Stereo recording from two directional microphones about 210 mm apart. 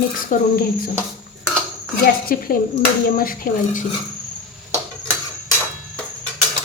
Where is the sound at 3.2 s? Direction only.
40° left (ahead or behind).